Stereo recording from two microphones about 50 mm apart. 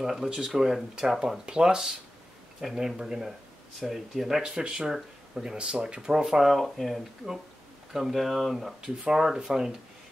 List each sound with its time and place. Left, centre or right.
0.0 s speech: centre